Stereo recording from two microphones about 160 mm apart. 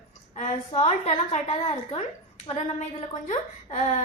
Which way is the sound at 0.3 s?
45° left (ahead or behind).